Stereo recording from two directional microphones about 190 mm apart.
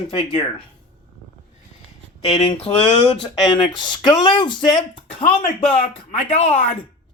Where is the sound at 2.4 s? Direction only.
30° left (ahead or behind).